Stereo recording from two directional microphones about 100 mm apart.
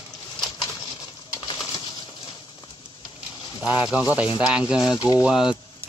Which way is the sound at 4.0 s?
15° right (ahead or behind).